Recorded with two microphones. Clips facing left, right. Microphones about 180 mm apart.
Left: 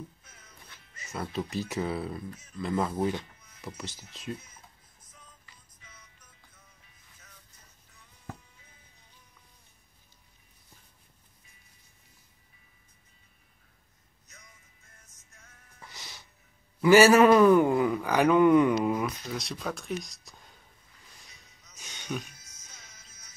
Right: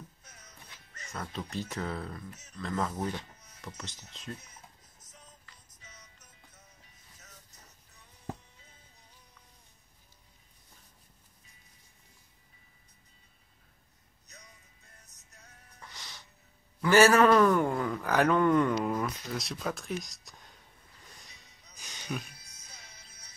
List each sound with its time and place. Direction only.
0.9 s speech: 10° left (ahead or behind)
5.8 s music: 40° right (ahead or behind)
14.2 s music: 35° right (ahead or behind)
15.8 s music: 5° left (ahead or behind)
16.8 s a man's voice: 5° left (ahead or behind)
18.0 s speech: centre (ahead or behind)
21.2 s a sound: centre (ahead or behind)
21.7 s speech: centre (ahead or behind)
22.4 s music: 35° right (ahead or behind)